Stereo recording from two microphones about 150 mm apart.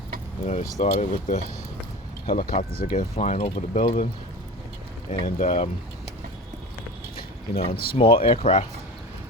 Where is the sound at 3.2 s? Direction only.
50° left (ahead or behind).